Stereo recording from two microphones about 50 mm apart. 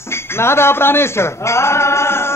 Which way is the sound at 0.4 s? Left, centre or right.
Left.